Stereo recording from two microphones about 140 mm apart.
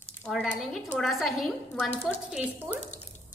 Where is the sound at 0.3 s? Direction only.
Centre (ahead or behind).